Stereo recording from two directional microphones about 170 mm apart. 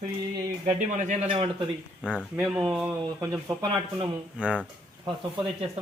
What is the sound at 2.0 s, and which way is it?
Speech, 5° right (ahead or behind).